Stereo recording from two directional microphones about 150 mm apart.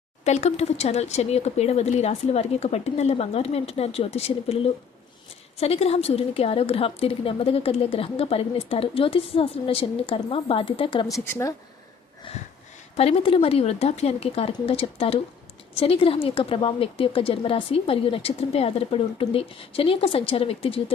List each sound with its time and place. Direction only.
0.3 s a woman's voice: 45° left (ahead or behind)
11.3 s speech: 20° left (ahead or behind)
13.0 s a woman's voice: 40° left (ahead or behind)